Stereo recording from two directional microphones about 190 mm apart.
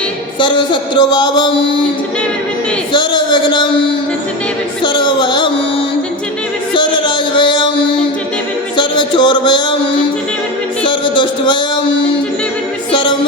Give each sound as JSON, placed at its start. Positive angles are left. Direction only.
{"t": 0.3, "sound": "speech", "side_deg": 25}
{"t": 2.9, "sound": "speech", "side_deg": 25}
{"t": 4.8, "sound": "speech", "side_deg": 25}
{"t": 6.7, "sound": "music", "side_deg": 25}
{"t": 8.7, "sound": "speech", "side_deg": 25}
{"t": 10.8, "sound": "speech", "side_deg": 25}
{"t": 12.9, "sound": "music", "side_deg": 25}